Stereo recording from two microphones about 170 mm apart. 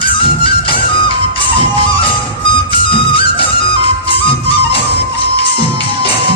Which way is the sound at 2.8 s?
30° left (ahead or behind).